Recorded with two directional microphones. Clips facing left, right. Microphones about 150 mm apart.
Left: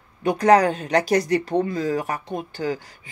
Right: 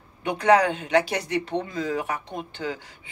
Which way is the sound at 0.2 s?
35° left (ahead or behind).